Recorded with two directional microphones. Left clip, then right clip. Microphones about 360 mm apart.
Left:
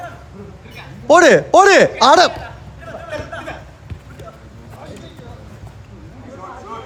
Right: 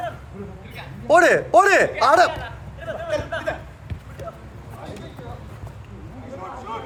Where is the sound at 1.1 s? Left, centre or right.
Centre.